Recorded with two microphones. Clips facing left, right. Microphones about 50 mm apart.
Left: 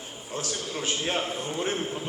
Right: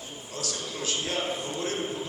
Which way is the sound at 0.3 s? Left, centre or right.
Left.